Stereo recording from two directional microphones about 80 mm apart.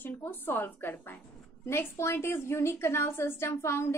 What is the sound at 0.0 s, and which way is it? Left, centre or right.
A woman's voice, left.